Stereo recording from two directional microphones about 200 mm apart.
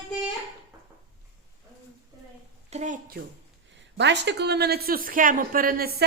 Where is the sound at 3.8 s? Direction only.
60° right (ahead or behind).